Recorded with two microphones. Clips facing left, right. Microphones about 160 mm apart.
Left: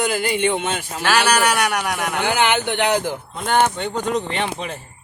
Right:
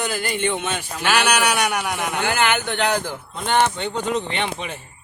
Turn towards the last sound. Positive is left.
turn(degrees=0)  # may be behind; listen again after turning